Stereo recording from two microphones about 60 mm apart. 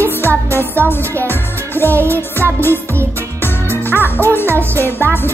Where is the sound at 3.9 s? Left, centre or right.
Left.